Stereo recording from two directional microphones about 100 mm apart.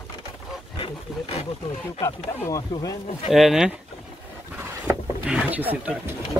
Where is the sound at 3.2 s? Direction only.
5° right (ahead or behind).